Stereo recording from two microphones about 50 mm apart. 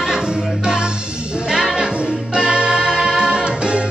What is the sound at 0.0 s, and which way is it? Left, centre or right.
Music, centre.